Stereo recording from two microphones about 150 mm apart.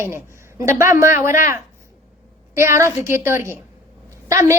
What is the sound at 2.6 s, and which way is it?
A woman's voice, 20° right (ahead or behind).